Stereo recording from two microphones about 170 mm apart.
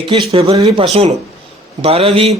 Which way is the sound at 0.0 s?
35° right (ahead or behind).